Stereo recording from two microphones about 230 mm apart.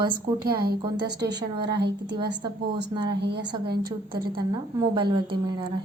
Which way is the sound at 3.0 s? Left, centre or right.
Right.